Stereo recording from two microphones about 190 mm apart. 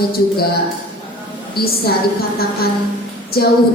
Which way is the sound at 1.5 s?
55° left (ahead or behind).